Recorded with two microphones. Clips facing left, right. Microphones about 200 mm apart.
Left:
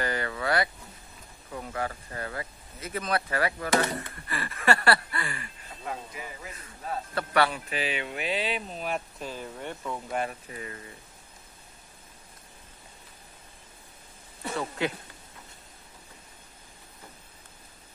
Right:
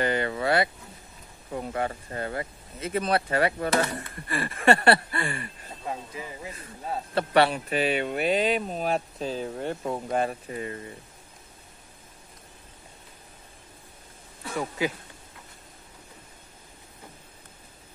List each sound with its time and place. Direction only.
0.0 s speech: 25° right (ahead or behind); by 8.9 s 45° right (ahead or behind)
8.9 s speech: 30° right (ahead or behind)
14.8 s speech: 10° right (ahead or behind)